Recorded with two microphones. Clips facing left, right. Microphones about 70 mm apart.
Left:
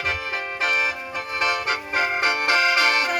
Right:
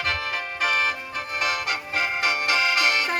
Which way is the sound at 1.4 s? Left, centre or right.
Left.